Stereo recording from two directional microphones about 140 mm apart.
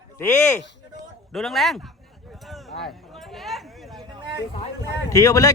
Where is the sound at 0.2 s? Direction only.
20° left (ahead or behind).